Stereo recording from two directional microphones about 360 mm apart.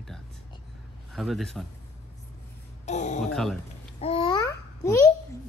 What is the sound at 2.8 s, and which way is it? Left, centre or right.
Speech, centre.